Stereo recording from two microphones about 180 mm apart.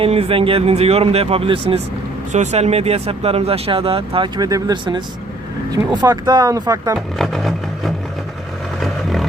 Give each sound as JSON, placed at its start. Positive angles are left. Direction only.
{"t": 0.0, "sound": "speech", "side_deg": -30}
{"t": 6.9, "sound": "speech", "side_deg": 0}
{"t": 8.8, "sound": "a sound", "side_deg": 0}